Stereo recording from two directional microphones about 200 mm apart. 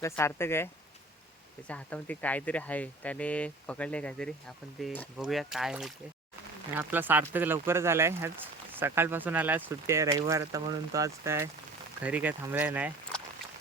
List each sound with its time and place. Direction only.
0.0 s speech: 15° left (ahead or behind); by 12.9 s 10° right (ahead or behind)